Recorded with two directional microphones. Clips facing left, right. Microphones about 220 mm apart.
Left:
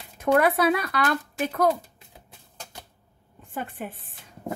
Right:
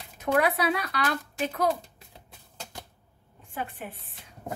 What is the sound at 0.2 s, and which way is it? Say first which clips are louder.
Speech: left 4 dB; 50° left (ahead or behind).